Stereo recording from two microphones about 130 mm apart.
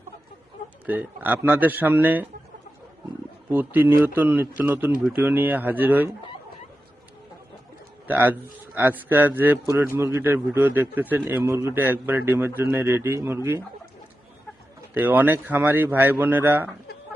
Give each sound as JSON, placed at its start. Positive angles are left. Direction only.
{"t": 0.9, "sound": "a man's voice", "side_deg": -15}
{"t": 3.5, "sound": "a man's voice", "side_deg": -15}
{"t": 8.0, "sound": "a man's voice", "side_deg": -15}
{"t": 14.9, "sound": "a man's voice", "side_deg": -15}